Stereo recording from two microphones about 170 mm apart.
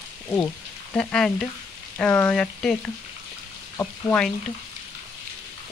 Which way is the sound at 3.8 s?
5° left (ahead or behind).